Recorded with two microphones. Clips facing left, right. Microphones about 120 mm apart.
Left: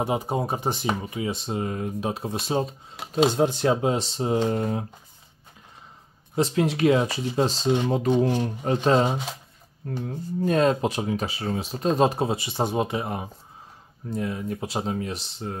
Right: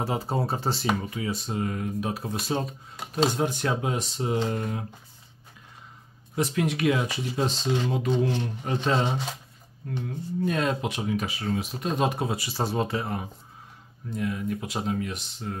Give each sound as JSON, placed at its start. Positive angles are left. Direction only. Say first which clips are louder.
{"t": 0.0, "sound": "speech", "louder": "left 3 dB", "side_deg": 20}
{"t": 6.3, "sound": "speech", "louder": "left 3 dB", "side_deg": 30}
{"t": 14.1, "sound": "speech", "louder": "left 1 dB", "side_deg": 30}